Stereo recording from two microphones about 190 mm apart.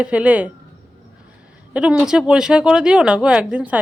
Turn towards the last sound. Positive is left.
turn(degrees=-5)  # may be behind; listen again after turning